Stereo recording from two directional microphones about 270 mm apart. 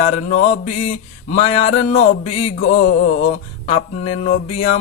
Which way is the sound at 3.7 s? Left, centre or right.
Left.